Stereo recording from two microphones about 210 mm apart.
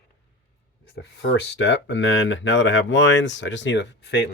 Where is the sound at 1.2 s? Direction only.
55° left (ahead or behind).